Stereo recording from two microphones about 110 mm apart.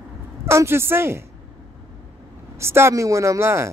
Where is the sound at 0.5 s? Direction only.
25° right (ahead or behind).